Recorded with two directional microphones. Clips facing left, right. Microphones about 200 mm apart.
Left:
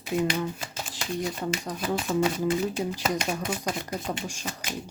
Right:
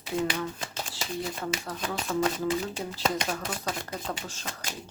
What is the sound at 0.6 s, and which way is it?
Shuffling cards, 5° left (ahead or behind).